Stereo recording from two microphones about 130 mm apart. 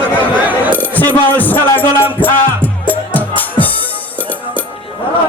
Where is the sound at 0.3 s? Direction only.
15° right (ahead or behind).